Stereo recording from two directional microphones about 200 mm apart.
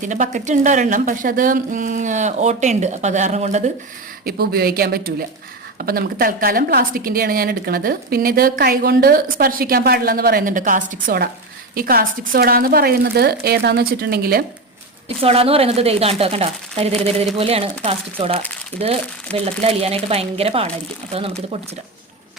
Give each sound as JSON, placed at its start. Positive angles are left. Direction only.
{"t": 0.0, "sound": "speech", "side_deg": -40}
{"t": 4.3, "sound": "a woman's voice", "side_deg": -50}
{"t": 15.2, "sound": "a woman's voice", "side_deg": -30}
{"t": 19.5, "sound": "a woman's voice", "side_deg": -30}